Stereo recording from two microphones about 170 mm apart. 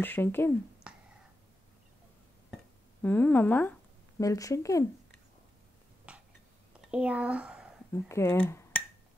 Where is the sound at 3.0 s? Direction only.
10° left (ahead or behind).